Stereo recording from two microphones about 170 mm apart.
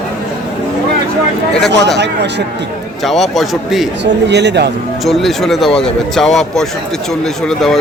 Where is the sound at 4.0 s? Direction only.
85° right.